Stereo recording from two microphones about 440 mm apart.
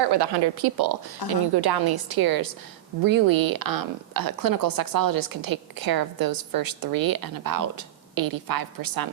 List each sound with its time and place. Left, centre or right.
0.0 s a woman's voice: right
1.2 s speech: left
1.5 s a woman's voice: right